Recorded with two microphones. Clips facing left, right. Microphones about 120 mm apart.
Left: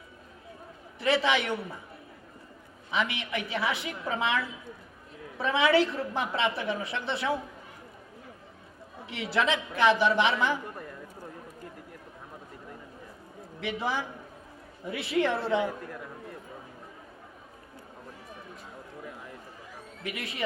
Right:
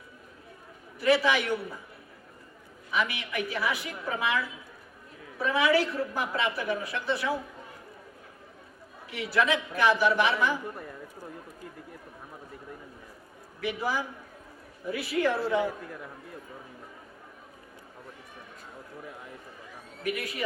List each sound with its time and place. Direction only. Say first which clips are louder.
0.9 s a man's voice: right 2 dB; 25° left (ahead or behind)
2.9 s a woman's voice: even; 25° left (ahead or behind)
5.4 s a woman's voice: left 1 dB; 25° left (ahead or behind)
9.0 s a woman's voice: right 1 dB; 25° left (ahead or behind)
13.6 s a woman's voice: right 1 dB; 25° left (ahead or behind)
20.0 s a woman's voice: right 5 dB; 25° left (ahead or behind)